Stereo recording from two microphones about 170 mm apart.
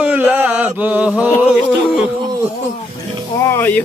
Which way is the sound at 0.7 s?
10° right (ahead or behind).